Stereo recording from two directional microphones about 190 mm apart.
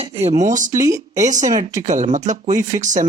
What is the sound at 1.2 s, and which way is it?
Speech, 40° right (ahead or behind).